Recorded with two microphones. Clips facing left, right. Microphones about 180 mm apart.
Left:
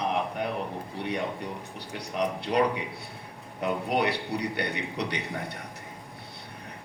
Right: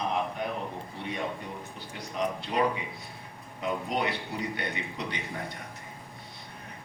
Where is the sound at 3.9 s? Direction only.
70° left (ahead or behind).